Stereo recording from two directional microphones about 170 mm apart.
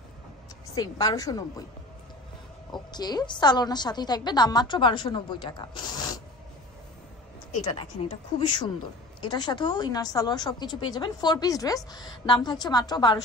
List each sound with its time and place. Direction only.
0.7 s a woman's voice: 20° left (ahead or behind)
2.7 s a woman's voice: 25° left (ahead or behind)
7.7 s a woman's voice: 30° left (ahead or behind)